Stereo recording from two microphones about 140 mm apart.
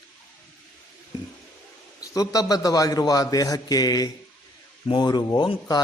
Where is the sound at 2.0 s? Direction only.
25° left (ahead or behind).